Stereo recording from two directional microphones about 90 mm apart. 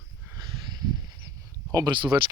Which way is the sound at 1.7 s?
55° right (ahead or behind).